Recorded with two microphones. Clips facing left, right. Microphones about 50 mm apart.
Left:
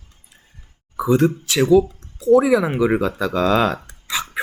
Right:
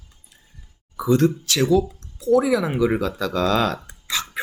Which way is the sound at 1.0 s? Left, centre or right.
Left.